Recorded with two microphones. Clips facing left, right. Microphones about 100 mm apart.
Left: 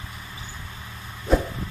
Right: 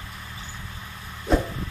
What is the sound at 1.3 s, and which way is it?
Vehicle, centre (ahead or behind).